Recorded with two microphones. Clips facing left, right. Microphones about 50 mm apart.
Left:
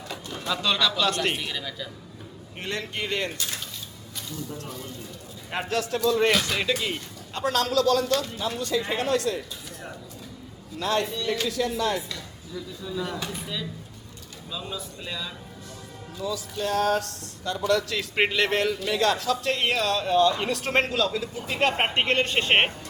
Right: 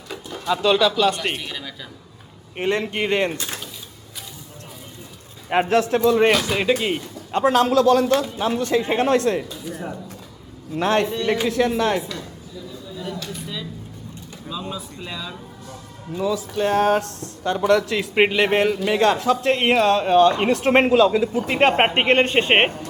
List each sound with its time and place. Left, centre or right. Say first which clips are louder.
0.4 s a man's voice: right 7 dB; centre
2.6 s speech: right 9 dB; right
5.5 s speech: right 9 dB; right
8.4 s speech: right 7 dB; right
9.6 s a man's voice: right 9 dB; centre
10.8 s speech: right 6 dB; right
13.1 s speech: right 1 dB; centre
15.0 s a man's voice: right 2 dB; centre
16.3 s speech: right 6 dB; right